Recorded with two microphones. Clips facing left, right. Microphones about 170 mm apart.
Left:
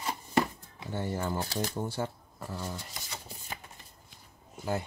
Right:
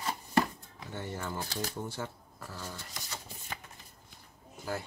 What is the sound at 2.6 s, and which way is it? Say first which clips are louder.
Shuffling cards: left 4 dB; 15° left (ahead or behind).